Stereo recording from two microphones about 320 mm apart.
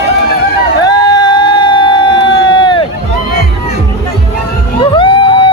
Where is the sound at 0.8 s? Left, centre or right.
Centre.